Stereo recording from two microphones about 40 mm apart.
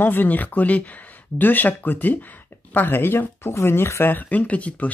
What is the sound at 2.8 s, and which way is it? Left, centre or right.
Speech, left.